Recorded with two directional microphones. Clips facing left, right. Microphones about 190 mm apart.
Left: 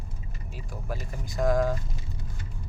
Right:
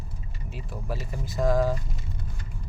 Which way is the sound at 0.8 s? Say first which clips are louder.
Right 2 dB; 5° right (ahead or behind).